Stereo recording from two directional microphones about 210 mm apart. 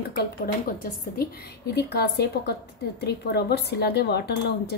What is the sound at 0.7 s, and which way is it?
Speech, 45° left (ahead or behind).